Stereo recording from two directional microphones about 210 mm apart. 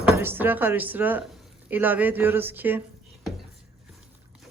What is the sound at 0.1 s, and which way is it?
Speech, 10° right (ahead or behind).